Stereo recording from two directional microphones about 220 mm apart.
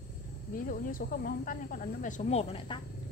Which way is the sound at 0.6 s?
40° left (ahead or behind).